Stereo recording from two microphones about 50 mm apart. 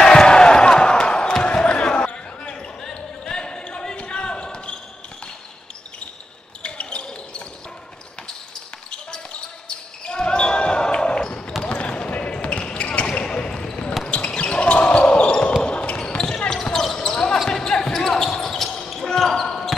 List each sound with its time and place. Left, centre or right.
0.0 s basketball bounce: centre
6.6 s basketball bounce: left
8.9 s basketball bounce: centre